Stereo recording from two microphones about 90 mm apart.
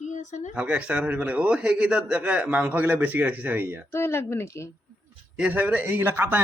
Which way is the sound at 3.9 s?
30° left (ahead or behind).